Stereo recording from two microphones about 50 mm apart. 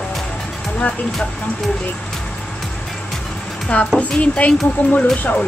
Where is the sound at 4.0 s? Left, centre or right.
Left.